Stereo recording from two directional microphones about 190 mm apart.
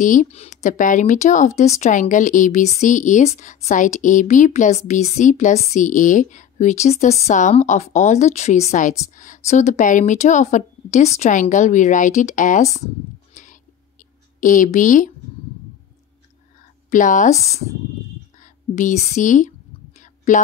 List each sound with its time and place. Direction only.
0.0 s a woman's voice: 45° left (ahead or behind)
16.9 s a woman's voice: 40° left (ahead or behind)